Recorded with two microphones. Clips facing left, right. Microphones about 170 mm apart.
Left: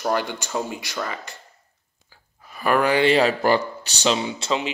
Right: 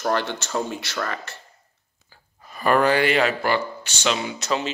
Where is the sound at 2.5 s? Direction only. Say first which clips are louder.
Right 1 dB; 5° left (ahead or behind).